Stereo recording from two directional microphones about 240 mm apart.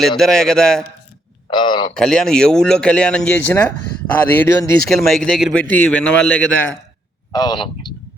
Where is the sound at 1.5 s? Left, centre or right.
Centre.